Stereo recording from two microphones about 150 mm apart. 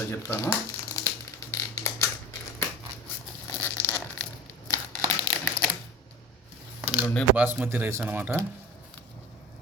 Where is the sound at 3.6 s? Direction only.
10° left (ahead or behind).